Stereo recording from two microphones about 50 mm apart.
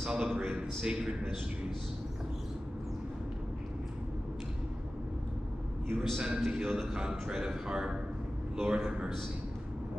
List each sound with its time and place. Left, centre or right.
0.0 s a man's voice: centre
6.1 s a man's voice: centre